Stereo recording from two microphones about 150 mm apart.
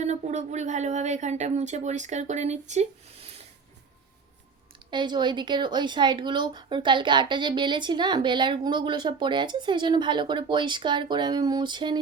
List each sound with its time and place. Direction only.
0.0 s speech: 50° right (ahead or behind)
4.9 s speech: 30° right (ahead or behind)